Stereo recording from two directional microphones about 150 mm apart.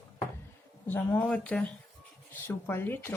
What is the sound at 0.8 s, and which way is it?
A woman's voice, 10° left (ahead or behind).